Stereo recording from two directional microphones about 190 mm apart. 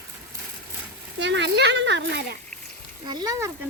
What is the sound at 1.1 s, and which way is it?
Speech, 70° right (ahead or behind).